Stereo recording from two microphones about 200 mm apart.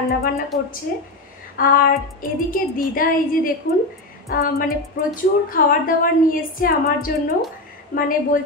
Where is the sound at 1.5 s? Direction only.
45° left (ahead or behind).